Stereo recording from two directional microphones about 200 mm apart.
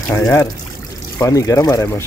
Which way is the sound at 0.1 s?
10° left (ahead or behind).